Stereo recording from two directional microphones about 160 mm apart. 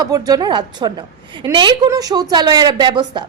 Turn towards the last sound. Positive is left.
turn(degrees=-30)  # may be behind; listen again after turning